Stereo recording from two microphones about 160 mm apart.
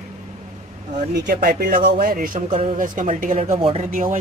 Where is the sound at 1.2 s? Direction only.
60° right (ahead or behind); by 2.7 s 40° right (ahead or behind).